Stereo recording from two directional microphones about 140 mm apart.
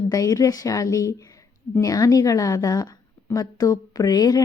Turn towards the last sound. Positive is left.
turn(degrees=25)  # may be behind; listen again after turning